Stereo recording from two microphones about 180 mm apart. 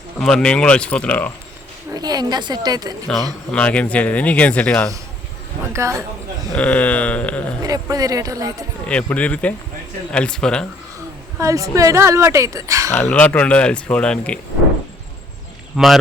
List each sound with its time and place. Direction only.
0.2 s speech: 5° left (ahead or behind)
1.9 s speech: 20° right (ahead or behind)
3.5 s speech: 5° left (ahead or behind)
5.7 s speech: 15° right (ahead or behind)
6.6 s speech: 10° left (ahead or behind)
7.6 s speech: 20° right (ahead or behind)
8.9 s speech: 5° left (ahead or behind)
11.3 s speech: 20° right (ahead or behind)
12.9 s speech: 10° left (ahead or behind)
15.8 s speech: centre (ahead or behind)